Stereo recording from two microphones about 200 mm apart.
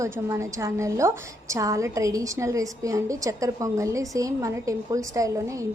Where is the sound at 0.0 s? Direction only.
15° right (ahead or behind).